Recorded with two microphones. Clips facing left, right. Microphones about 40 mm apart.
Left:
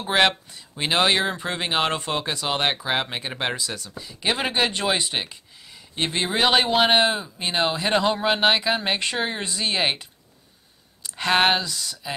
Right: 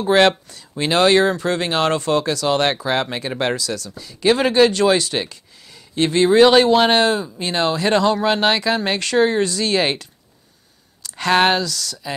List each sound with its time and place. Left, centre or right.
0.0 s speech: centre
0.5 s speech: left
11.6 s speech: left